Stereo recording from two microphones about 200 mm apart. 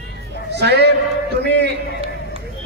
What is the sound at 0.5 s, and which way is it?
Speech, 55° right (ahead or behind).